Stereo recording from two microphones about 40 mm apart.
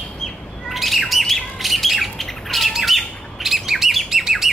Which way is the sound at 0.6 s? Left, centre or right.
Centre.